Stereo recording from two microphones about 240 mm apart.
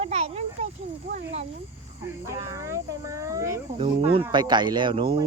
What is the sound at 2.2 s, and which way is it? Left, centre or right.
A child's voice, centre.